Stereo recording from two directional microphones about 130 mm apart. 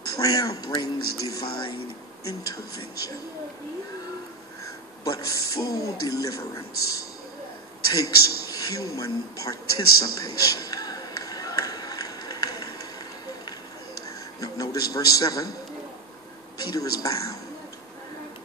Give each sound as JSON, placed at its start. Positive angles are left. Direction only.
{"t": 0.1, "sound": "speech", "side_deg": 25}
{"t": 5.0, "sound": "speech", "side_deg": 25}
{"t": 14.4, "sound": "speech", "side_deg": 25}
{"t": 16.5, "sound": "speech", "side_deg": 30}